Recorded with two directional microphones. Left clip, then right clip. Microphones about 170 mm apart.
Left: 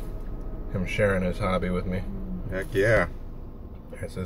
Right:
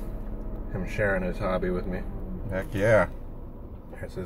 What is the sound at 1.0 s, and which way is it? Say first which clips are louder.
Speech: left 2 dB; 20° left (ahead or behind).